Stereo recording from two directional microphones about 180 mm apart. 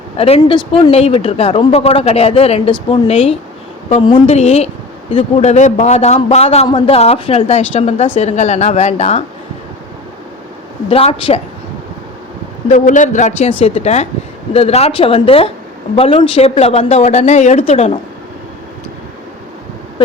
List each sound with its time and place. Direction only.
0.2 s a woman's voice: 30° left (ahead or behind)
10.8 s a woman's voice: 30° left (ahead or behind)
12.6 s a woman's voice: 45° left (ahead or behind)